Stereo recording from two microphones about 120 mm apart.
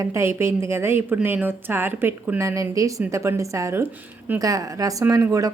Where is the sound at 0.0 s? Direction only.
25° right (ahead or behind).